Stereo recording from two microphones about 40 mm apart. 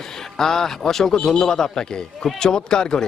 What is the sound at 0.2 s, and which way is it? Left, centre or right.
A man's voice, centre.